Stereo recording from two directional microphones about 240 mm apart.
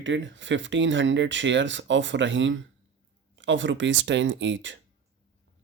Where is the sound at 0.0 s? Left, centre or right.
Right.